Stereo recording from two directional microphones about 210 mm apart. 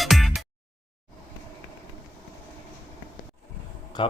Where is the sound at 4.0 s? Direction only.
20° left (ahead or behind).